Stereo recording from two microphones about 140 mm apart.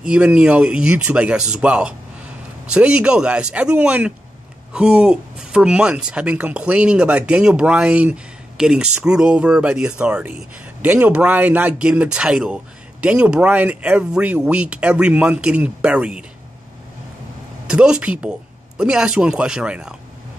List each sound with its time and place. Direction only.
0.0 s speech: 5° right (ahead or behind)
17.6 s a man's voice: 5° right (ahead or behind)